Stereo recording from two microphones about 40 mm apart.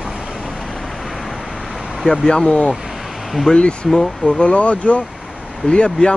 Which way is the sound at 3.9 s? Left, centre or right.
Centre.